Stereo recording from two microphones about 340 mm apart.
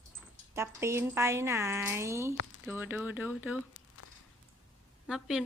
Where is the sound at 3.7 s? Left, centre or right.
Left.